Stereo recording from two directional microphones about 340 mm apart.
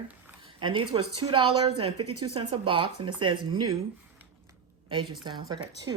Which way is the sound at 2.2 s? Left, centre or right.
Centre.